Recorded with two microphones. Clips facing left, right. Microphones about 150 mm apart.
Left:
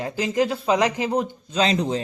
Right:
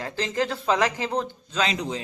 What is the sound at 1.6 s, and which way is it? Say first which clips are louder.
Speech: left 5 dB; 30° left (ahead or behind).